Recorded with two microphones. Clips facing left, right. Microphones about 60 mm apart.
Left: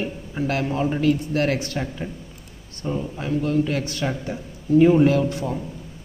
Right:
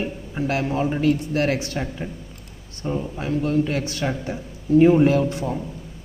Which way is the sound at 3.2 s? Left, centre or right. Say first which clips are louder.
Even; right.